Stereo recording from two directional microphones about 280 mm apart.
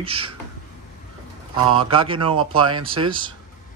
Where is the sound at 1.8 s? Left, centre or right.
Centre.